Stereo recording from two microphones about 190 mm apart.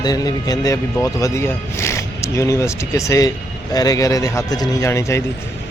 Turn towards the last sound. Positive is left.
turn(degrees=15)  # may be behind; listen again after turning